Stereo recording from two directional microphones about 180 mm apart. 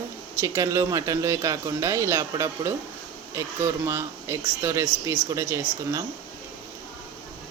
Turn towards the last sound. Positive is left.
turn(degrees=-15)  # may be behind; listen again after turning